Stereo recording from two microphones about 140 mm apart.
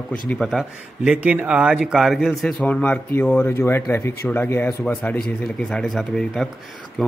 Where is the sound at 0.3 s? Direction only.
Centre (ahead or behind).